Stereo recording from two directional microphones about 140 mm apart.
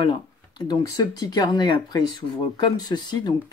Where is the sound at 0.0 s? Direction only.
35° left (ahead or behind).